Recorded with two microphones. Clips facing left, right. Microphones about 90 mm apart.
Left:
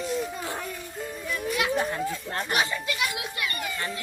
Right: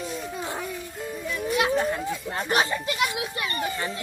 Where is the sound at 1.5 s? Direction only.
30° right (ahead or behind).